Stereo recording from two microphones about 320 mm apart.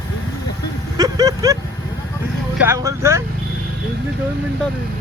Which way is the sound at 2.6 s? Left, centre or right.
Centre.